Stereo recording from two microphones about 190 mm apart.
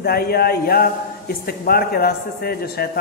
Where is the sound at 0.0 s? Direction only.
55° left (ahead or behind).